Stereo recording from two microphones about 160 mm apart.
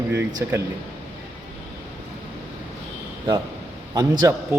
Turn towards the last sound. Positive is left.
turn(degrees=-25)  # may be behind; listen again after turning